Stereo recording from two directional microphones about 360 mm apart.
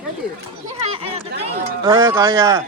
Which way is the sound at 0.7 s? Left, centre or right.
Centre.